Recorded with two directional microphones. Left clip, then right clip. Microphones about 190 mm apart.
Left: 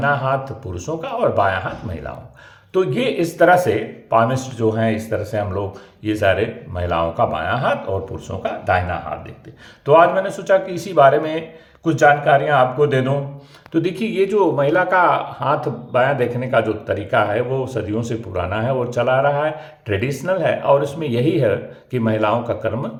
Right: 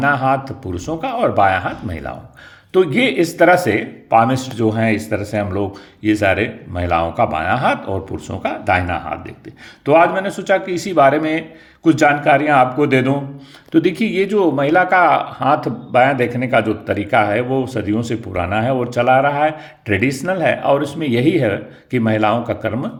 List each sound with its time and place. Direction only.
0.0 s speech: 20° right (ahead or behind)